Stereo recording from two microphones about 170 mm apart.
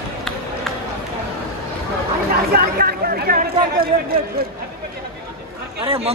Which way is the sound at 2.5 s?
65° right (ahead or behind).